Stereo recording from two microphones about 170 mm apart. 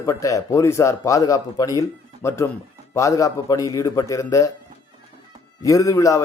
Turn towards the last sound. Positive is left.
turn(degrees=20)  # may be behind; listen again after turning